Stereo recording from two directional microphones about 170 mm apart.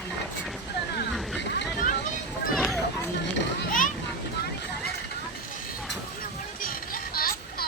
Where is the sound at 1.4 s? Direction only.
90° left.